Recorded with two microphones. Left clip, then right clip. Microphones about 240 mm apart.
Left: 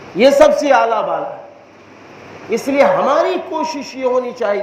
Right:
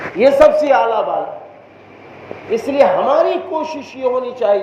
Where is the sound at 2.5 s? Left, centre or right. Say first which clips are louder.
Even; left.